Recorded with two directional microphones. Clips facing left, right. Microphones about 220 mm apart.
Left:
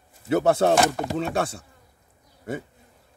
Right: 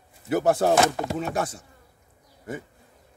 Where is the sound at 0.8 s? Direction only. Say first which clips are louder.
Even; centre (ahead or behind).